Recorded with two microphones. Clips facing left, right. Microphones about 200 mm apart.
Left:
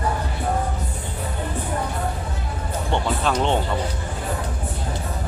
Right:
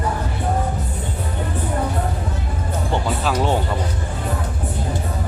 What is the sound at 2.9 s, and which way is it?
Speech, 5° right (ahead or behind).